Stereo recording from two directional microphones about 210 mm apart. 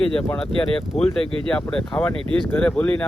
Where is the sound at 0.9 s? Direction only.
30° left (ahead or behind).